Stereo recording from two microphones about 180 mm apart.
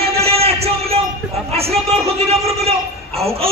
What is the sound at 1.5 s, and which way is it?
Speech, 35° right (ahead or behind).